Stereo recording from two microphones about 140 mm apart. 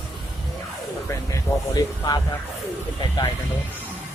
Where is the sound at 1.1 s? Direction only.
25° left (ahead or behind).